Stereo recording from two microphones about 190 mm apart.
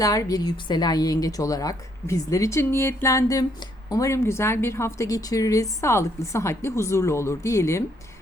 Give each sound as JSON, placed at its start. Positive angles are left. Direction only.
{"t": 0.0, "sound": "a woman's voice", "side_deg": 20}